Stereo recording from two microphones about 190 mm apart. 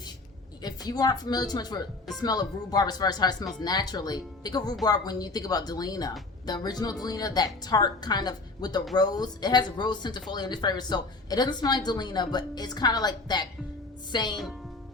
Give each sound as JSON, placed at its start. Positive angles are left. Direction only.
{"t": 0.6, "sound": "speech", "side_deg": 20}